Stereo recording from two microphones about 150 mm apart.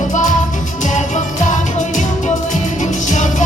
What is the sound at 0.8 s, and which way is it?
Music, 55° left (ahead or behind).